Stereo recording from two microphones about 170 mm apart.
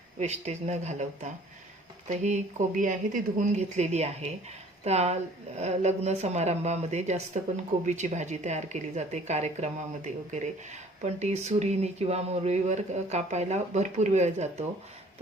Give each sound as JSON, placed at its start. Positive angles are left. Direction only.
{"t": 0.2, "sound": "speech", "side_deg": -40}